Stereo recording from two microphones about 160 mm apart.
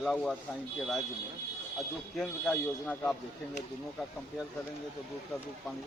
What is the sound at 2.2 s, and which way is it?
Speech, 5° left (ahead or behind).